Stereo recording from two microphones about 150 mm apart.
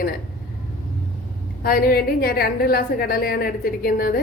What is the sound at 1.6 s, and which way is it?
A woman's voice, 75° left (ahead or behind).